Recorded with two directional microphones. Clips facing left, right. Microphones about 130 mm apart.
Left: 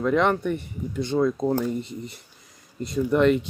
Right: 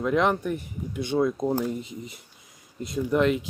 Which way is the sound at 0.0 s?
5° right (ahead or behind).